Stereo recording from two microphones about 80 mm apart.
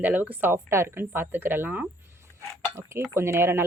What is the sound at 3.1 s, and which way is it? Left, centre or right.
Speech, right.